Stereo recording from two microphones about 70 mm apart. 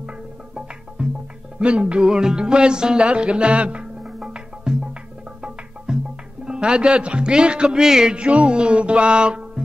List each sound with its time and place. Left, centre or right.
1.0 s music: centre
5.9 s music: centre
6.4 s speech: centre